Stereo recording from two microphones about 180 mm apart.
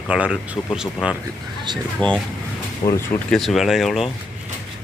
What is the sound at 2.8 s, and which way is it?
Speech, 25° left (ahead or behind).